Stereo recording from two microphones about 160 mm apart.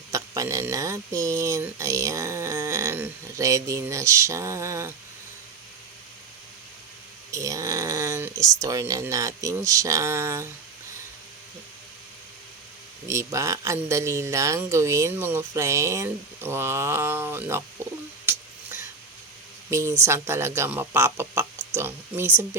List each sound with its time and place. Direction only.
0.1 s speech: 20° right (ahead or behind)
7.3 s speech: 20° right (ahead or behind)
13.1 s speech: 20° right (ahead or behind)
18.3 s a sound: 15° right (ahead or behind)
19.7 s speech: 15° right (ahead or behind)